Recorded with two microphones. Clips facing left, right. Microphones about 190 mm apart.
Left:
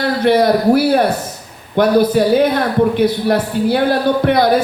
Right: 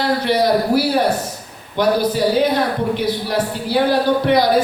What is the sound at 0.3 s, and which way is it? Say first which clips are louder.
A man's voice: left 6 dB; 55° left (ahead or behind).